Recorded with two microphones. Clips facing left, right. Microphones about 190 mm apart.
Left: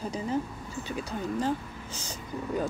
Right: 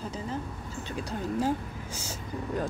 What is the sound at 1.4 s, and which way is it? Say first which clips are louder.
Speech: right 1 dB; 10° right (ahead or behind).